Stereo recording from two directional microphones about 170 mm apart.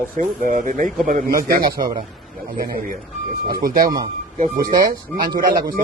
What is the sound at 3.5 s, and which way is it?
Speech, 55° right (ahead or behind).